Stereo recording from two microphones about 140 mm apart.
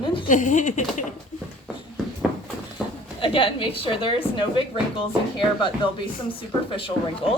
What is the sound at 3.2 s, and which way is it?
A woman's voice, 40° left (ahead or behind).